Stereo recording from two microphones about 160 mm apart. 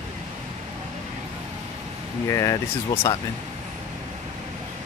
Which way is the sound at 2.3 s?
15° left (ahead or behind).